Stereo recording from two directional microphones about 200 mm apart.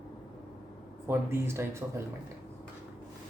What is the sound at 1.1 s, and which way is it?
Speech, 10° right (ahead or behind).